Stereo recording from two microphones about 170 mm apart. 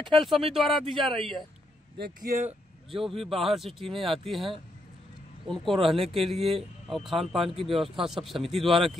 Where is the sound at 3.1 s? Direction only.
35° right (ahead or behind).